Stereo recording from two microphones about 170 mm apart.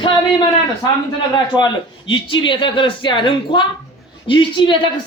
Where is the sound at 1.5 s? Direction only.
30° left (ahead or behind).